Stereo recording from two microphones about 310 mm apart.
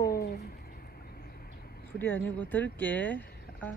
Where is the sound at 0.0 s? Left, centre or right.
Left.